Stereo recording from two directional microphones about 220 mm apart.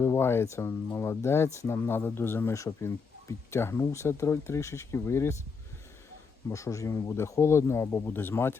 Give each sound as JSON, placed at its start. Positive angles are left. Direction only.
{"t": 0.0, "sound": "speech", "side_deg": 10}
{"t": 6.5, "sound": "speech", "side_deg": 15}